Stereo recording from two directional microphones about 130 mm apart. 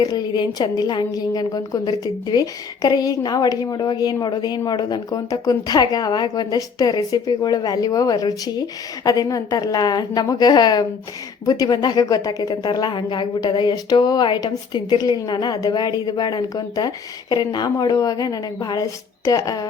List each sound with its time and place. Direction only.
0.0 s a woman's voice: 35° left (ahead or behind)